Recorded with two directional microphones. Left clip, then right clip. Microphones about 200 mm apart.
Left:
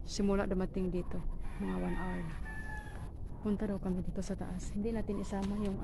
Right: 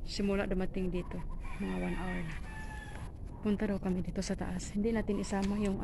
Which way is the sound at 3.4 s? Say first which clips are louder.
Right 3 dB; 5° right (ahead or behind).